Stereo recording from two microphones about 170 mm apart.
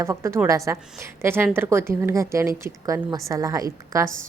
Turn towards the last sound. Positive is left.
turn(degrees=-20)  # may be behind; listen again after turning